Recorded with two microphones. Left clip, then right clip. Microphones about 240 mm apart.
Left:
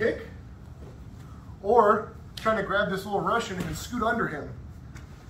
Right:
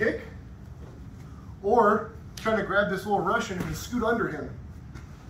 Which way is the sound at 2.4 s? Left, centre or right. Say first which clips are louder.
Even; centre.